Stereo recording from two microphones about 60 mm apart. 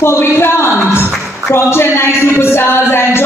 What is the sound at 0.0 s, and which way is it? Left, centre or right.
A man's voice, left.